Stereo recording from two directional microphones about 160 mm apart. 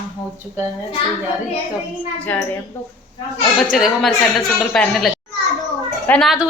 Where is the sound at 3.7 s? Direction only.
Centre (ahead or behind).